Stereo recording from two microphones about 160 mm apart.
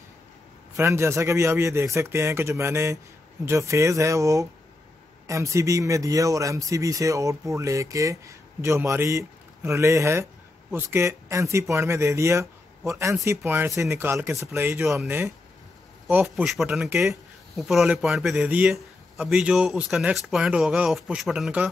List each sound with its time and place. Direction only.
0.7 s a man's voice: 15° right (ahead or behind)